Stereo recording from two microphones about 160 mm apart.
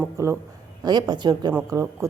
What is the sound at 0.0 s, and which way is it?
A man's voice, 15° right (ahead or behind).